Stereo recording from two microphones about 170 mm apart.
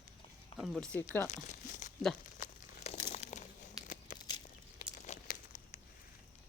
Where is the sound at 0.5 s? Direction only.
Centre (ahead or behind).